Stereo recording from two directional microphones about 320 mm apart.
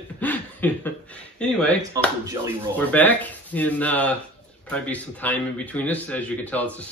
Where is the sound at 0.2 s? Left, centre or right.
Centre.